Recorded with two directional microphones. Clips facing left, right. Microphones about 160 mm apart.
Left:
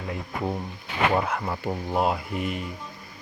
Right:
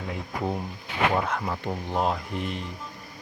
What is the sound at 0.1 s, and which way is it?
Speech, centre (ahead or behind).